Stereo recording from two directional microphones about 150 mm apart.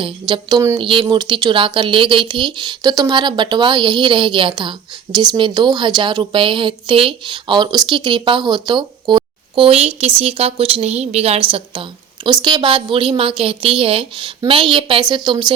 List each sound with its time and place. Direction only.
0.0 s speech: 30° right (ahead or behind)
0.8 s a woman's voice: 35° right (ahead or behind)